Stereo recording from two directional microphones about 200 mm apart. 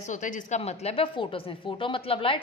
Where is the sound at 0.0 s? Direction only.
40° left (ahead or behind).